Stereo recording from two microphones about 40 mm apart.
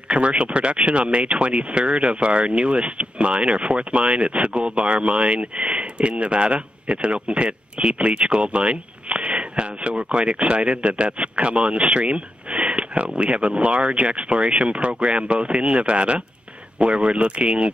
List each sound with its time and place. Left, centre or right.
0.1 s speech: right